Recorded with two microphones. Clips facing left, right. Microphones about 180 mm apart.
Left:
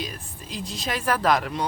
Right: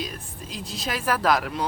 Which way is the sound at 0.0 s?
Centre (ahead or behind).